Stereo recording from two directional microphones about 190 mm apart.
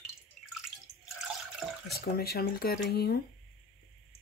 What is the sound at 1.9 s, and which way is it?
Speech, 55° left (ahead or behind).